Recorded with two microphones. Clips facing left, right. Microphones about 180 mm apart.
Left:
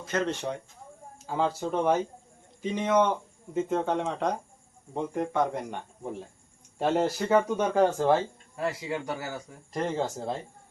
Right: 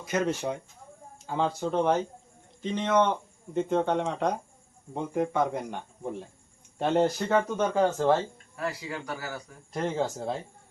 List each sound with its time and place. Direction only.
0.0 s speech: 10° right (ahead or behind)
1.3 s speech: centre (ahead or behind)
8.5 s speech: 25° left (ahead or behind)
9.7 s speech: centre (ahead or behind)